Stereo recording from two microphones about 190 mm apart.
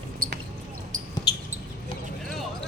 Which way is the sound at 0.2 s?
50° right (ahead or behind).